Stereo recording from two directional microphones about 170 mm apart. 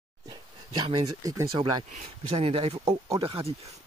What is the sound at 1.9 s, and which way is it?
Speech, 40° right (ahead or behind).